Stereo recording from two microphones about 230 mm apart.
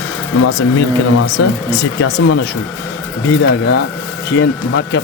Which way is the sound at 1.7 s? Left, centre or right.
Left.